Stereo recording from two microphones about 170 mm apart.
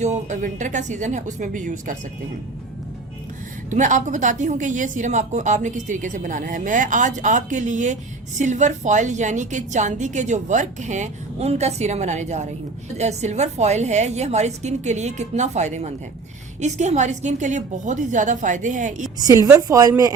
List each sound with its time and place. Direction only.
0.0 s a woman's voice: 45° right (ahead or behind)
3.7 s a woman's voice: 45° right (ahead or behind)
19.2 s speech: 20° right (ahead or behind)